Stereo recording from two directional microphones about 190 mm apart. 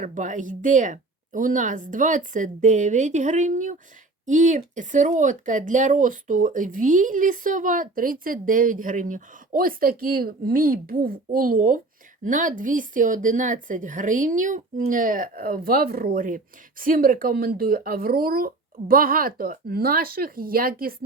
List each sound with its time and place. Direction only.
0.0 s a woman's voice: 40° right (ahead or behind)